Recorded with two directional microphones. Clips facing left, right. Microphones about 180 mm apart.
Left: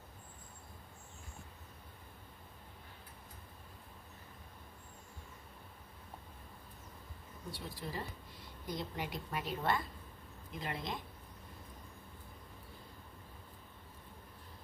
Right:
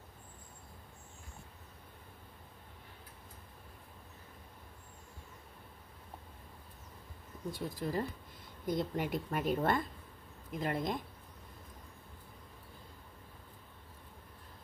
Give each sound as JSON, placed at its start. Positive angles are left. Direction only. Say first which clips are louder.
{"t": 7.5, "sound": "a woman's voice", "louder": "right 7 dB", "side_deg": -50}